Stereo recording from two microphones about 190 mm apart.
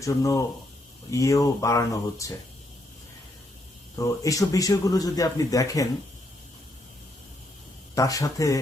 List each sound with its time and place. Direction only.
0.0 s a man's voice: 15° left (ahead or behind)
3.9 s a man's voice: 15° left (ahead or behind)
7.9 s a man's voice: 20° left (ahead or behind)